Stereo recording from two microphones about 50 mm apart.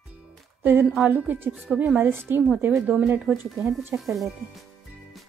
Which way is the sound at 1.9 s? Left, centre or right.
Right.